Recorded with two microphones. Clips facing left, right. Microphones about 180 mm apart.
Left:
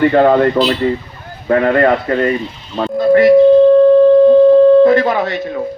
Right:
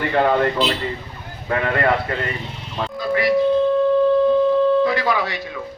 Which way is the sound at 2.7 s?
45° left (ahead or behind).